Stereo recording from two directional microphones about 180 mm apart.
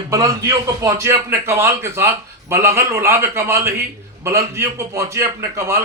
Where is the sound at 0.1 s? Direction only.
20° right (ahead or behind).